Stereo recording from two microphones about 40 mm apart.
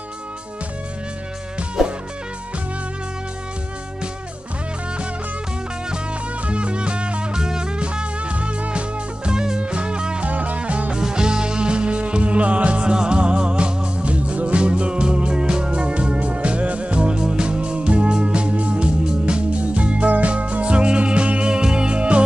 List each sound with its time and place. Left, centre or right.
1.8 s music: centre
6.4 s music: right
10.2 s music: right
11.0 s music: centre